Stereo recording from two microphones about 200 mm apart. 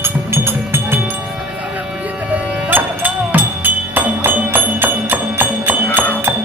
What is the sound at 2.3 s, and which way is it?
Music, 10° right (ahead or behind).